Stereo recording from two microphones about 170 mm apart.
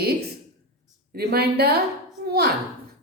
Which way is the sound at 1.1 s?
65° right (ahead or behind).